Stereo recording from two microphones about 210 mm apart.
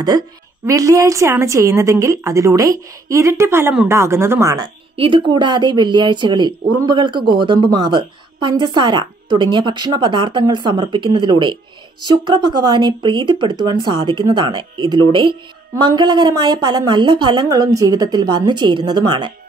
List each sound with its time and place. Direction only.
0.7 s a woman's voice: 15° right (ahead or behind)
4.9 s speech: 25° right (ahead or behind)